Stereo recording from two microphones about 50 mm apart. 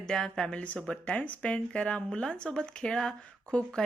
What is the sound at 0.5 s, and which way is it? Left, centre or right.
Speech, left.